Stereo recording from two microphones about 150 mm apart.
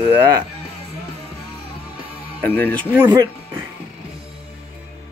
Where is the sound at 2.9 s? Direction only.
10° right (ahead or behind).